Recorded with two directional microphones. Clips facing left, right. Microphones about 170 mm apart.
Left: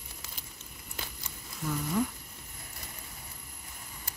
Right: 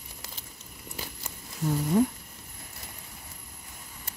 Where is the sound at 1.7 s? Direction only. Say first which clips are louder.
Right 6 dB; 35° right (ahead or behind).